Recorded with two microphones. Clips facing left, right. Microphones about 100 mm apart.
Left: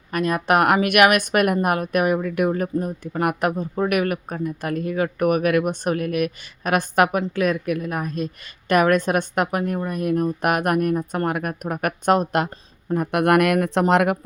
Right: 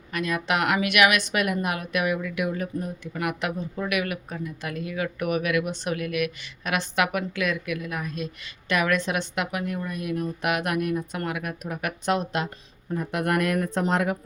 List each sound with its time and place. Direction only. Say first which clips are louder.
0.1 s speech: left 6 dB; 45° left (ahead or behind)
12.9 s speech: left 8 dB; 60° left (ahead or behind)